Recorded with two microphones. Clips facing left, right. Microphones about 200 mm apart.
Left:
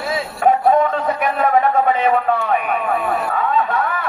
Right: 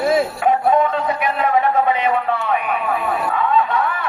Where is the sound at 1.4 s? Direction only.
45° left (ahead or behind).